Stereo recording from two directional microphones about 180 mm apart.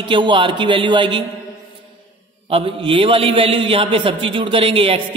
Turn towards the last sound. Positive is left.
turn(degrees=-30)  # may be behind; listen again after turning